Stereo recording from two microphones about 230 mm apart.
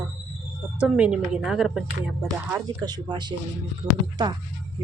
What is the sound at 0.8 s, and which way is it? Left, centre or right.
A woman's voice, centre.